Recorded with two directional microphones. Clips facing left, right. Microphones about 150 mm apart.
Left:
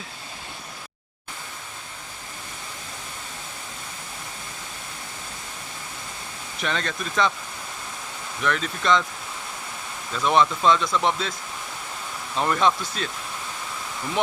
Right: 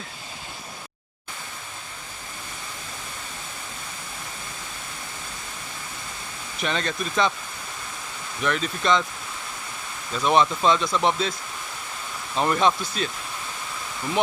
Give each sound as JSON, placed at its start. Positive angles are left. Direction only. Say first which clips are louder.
{"t": 6.6, "sound": "speech", "louder": "right 1 dB", "side_deg": -20}
{"t": 8.4, "sound": "speech", "louder": "right 1 dB", "side_deg": -20}
{"t": 10.1, "sound": "speech", "louder": "even", "side_deg": -20}
{"t": 12.4, "sound": "speech", "louder": "right 1 dB", "side_deg": -15}